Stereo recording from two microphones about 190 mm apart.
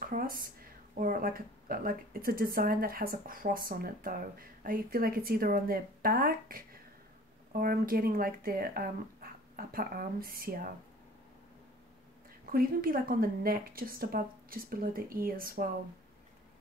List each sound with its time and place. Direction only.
0.0 s speech: 50° right (ahead or behind)
12.4 s speech: 50° right (ahead or behind)